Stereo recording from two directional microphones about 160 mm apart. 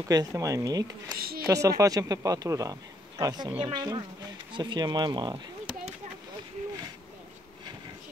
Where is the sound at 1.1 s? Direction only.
70° right (ahead or behind).